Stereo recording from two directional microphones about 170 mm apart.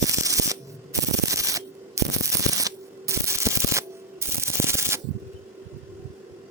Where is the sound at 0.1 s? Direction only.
20° right (ahead or behind).